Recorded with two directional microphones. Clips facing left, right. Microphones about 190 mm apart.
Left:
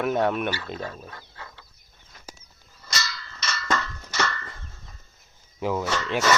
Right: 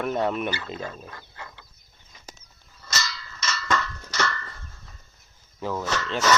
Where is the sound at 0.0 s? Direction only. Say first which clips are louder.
Left 2 dB; 5° left (ahead or behind).